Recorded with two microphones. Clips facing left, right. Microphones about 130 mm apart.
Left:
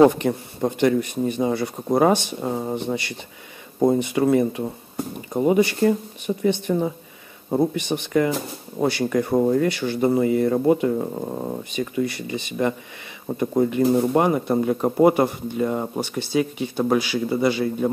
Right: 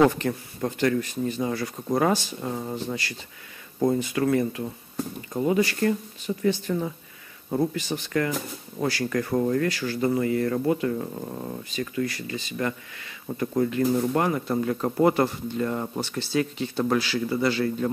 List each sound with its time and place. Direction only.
0.0 s speech: 20° left (ahead or behind)
3.8 s speech: 20° left (ahead or behind)
11.8 s speech: 15° left (ahead or behind)